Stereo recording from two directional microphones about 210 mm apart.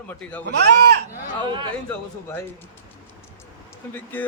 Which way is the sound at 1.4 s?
25° right (ahead or behind).